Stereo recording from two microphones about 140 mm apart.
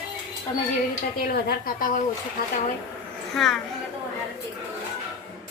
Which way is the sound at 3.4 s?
5° left (ahead or behind).